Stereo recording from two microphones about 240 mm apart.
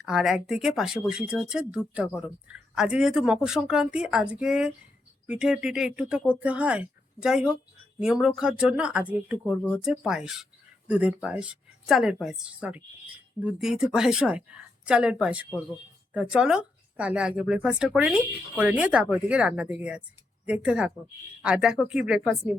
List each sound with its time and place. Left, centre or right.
0.0 s speech: centre